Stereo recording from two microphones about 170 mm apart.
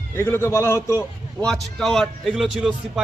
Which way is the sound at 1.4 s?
5° left (ahead or behind).